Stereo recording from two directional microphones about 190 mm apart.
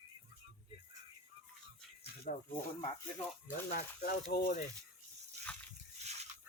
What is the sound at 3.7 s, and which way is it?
Speech, 55° left (ahead or behind).